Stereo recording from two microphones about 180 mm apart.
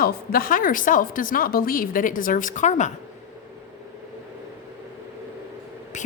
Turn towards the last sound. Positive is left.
turn(degrees=40)  # may be behind; listen again after turning